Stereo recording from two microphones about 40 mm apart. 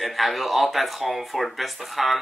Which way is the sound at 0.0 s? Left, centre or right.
Centre.